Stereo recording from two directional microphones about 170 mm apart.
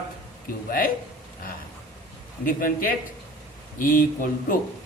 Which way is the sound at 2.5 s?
55° left (ahead or behind).